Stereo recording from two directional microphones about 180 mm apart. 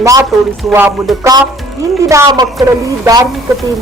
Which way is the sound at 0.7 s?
15° right (ahead or behind).